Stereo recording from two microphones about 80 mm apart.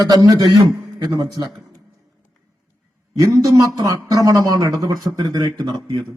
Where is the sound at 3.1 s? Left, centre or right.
Right.